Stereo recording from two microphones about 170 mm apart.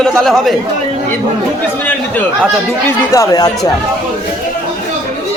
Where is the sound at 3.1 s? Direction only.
20° left (ahead or behind).